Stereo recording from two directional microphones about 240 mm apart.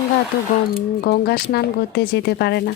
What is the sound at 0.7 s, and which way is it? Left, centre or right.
Speech, left.